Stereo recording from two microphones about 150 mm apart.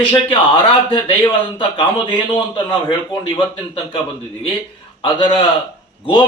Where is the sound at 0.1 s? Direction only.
35° left (ahead or behind).